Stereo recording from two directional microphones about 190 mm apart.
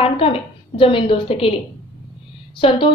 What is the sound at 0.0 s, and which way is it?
A woman's voice, 30° left (ahead or behind).